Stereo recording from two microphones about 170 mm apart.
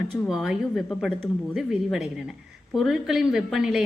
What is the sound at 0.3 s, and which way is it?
A woman's voice, 5° right (ahead or behind).